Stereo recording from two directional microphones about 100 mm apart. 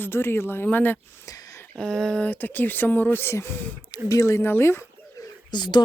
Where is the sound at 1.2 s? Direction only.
35° left (ahead or behind).